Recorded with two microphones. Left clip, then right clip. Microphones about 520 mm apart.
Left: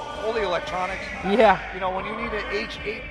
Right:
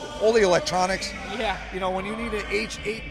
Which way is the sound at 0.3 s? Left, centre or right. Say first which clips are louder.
Right 4 dB; right.